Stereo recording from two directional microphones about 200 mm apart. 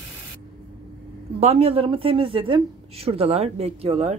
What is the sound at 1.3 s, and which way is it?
Speech, 30° right (ahead or behind).